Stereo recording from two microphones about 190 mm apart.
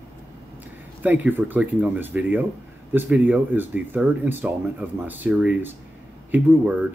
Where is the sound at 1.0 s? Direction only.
10° right (ahead or behind).